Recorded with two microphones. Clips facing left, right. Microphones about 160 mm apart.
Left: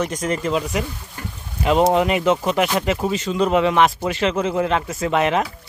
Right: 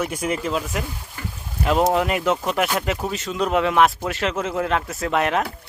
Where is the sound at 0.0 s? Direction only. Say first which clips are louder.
Left 2 dB; 10° right (ahead or behind).